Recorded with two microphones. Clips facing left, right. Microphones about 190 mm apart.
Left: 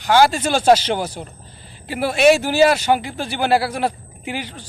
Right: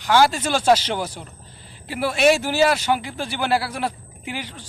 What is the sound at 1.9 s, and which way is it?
Speech, 65° left (ahead or behind).